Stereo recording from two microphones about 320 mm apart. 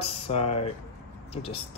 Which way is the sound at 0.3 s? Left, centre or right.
Centre.